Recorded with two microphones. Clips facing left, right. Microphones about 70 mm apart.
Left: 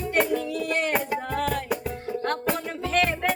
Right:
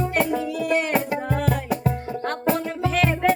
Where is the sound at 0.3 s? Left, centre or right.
Centre.